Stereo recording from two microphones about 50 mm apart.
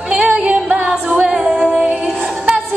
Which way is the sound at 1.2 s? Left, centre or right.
Centre.